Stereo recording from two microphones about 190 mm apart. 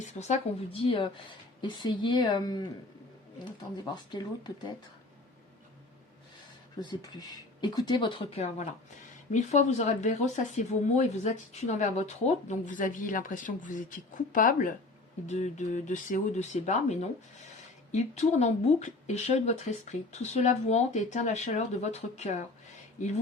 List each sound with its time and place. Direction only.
0.0 s speech: 35° left (ahead or behind)
6.7 s speech: 20° left (ahead or behind)
9.3 s speech: 40° left (ahead or behind)